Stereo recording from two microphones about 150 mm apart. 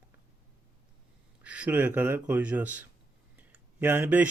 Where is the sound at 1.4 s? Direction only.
10° right (ahead or behind).